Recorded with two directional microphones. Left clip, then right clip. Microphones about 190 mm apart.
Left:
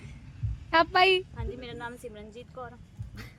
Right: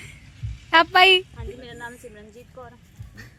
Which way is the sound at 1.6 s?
20° left (ahead or behind).